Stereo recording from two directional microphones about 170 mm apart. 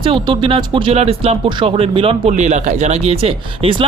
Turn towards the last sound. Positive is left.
turn(degrees=-35)  # may be behind; listen again after turning